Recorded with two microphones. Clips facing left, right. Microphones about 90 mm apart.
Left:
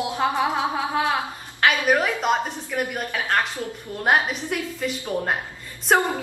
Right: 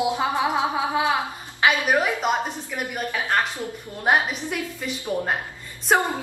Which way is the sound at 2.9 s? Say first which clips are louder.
Right 3 dB; 15° right (ahead or behind).